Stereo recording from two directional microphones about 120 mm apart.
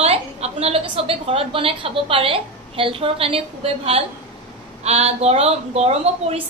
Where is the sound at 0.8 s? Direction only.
50° right (ahead or behind).